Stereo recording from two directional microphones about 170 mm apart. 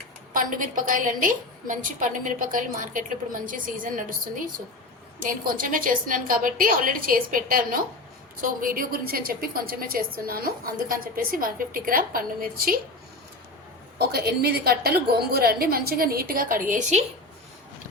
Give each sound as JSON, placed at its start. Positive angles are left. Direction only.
{"t": 0.3, "sound": "a woman's voice", "side_deg": -50}
{"t": 5.2, "sound": "a woman's voice", "side_deg": -55}
{"t": 14.1, "sound": "a woman's voice", "side_deg": -70}